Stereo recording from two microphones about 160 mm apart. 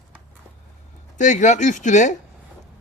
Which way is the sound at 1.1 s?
50° left (ahead or behind).